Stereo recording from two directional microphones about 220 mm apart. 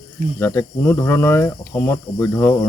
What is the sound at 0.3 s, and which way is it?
Speech, 10° left (ahead or behind).